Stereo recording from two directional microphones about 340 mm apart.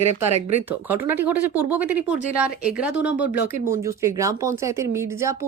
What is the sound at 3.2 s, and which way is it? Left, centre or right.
Speech, left.